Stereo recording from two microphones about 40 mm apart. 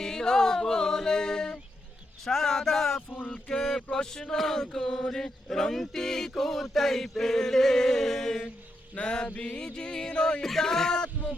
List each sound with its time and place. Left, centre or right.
0.0 s music: centre
2.2 s speech: centre
3.5 s a sound: centre
3.9 s chant: centre
9.0 s music: left
9.2 s music: left
10.4 s chant: centre